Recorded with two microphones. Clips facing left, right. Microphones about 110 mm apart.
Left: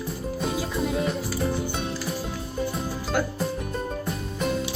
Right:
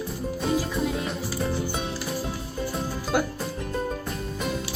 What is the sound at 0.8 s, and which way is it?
Music, centre (ahead or behind).